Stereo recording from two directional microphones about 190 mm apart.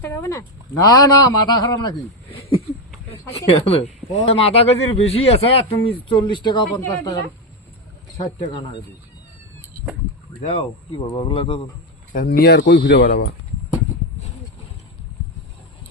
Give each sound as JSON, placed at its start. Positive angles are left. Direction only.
{"t": 0.0, "sound": "speech", "side_deg": 15}
{"t": 3.1, "sound": "speech", "side_deg": 30}
{"t": 10.5, "sound": "speech", "side_deg": 30}
{"t": 12.1, "sound": "speech", "side_deg": 55}
{"t": 12.5, "sound": "speech", "side_deg": 70}